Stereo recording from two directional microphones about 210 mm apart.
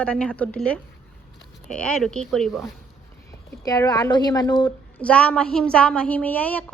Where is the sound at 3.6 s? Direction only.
15° left (ahead or behind).